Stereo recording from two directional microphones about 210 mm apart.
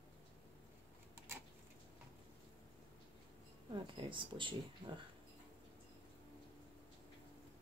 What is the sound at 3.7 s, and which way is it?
Speech, 25° right (ahead or behind).